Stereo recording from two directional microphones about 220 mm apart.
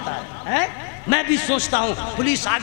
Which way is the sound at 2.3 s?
10° left (ahead or behind).